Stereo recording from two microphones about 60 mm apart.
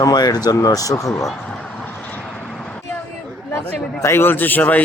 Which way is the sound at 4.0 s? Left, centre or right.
Left.